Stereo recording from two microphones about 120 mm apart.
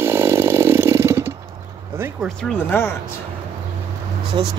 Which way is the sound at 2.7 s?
20° left (ahead or behind).